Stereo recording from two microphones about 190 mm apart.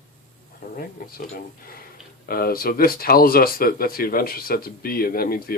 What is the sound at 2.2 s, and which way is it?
A man's voice, 50° left (ahead or behind).